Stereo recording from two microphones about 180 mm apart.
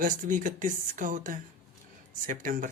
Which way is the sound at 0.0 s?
45° right (ahead or behind).